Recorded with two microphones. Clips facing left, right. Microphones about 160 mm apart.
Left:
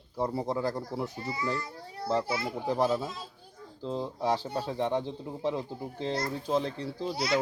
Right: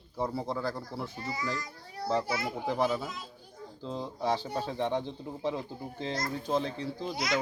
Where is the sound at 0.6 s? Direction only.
15° left (ahead or behind).